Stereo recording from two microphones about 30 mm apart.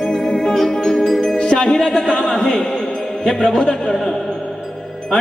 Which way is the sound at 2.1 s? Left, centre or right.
Left.